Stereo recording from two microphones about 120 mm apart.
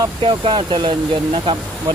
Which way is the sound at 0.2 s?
45° right (ahead or behind).